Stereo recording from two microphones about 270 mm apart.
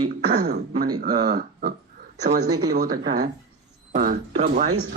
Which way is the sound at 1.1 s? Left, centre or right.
Right.